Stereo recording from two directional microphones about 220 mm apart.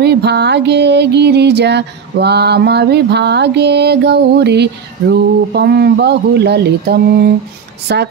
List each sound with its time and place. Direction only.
0.0 s music: 50° right (ahead or behind)